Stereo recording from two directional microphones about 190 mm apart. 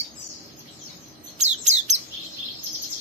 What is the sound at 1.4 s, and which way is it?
Chirp, 35° right (ahead or behind).